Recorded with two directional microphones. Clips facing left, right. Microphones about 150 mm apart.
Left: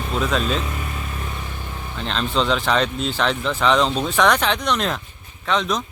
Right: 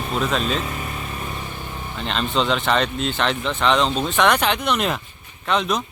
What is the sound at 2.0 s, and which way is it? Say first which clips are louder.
Speech: even; centre (ahead or behind).